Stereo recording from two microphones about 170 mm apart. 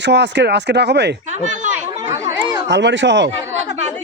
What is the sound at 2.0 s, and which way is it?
Chatter, 15° right (ahead or behind).